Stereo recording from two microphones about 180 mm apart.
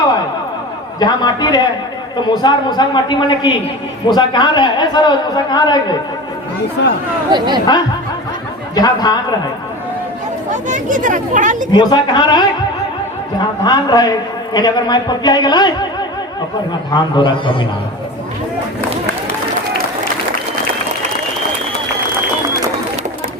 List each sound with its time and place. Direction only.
0.9 s a man's voice: 20° left (ahead or behind)
6.8 s speech: 80° left
7.3 s speech: 25° right (ahead or behind)
8.7 s a man's voice: 20° left (ahead or behind)
10.7 s speech: 45° right (ahead or behind)
11.7 s a man's voice: 25° left (ahead or behind)
13.7 s a man's voice: 20° left (ahead or behind)